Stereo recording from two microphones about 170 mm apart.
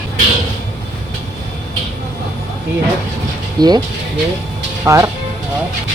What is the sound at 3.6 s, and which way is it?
Speech, 25° right (ahead or behind).